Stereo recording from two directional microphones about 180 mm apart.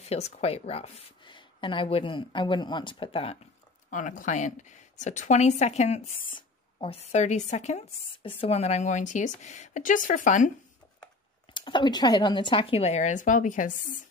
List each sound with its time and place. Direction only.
0.1 s a woman's voice: 35° left (ahead or behind)
3.9 s a woman's voice: 45° left (ahead or behind)
11.5 s a woman's voice: 25° left (ahead or behind); by 14.0 s 45° left (ahead or behind)